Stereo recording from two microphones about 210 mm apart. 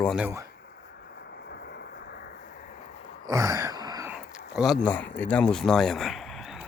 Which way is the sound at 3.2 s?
15° right (ahead or behind).